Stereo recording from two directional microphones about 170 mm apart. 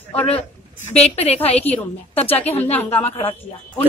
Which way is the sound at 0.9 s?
40° left (ahead or behind).